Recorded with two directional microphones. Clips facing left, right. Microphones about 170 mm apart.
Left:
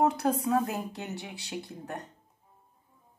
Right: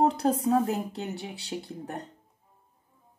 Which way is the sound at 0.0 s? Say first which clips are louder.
Right 2 dB; 30° right (ahead or behind).